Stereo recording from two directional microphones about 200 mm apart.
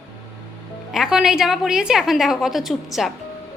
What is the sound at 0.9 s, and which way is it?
A woman's voice, 5° right (ahead or behind).